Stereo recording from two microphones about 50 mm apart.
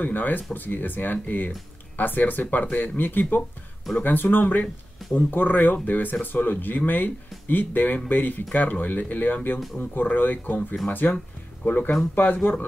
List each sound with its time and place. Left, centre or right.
0.0 s speech: left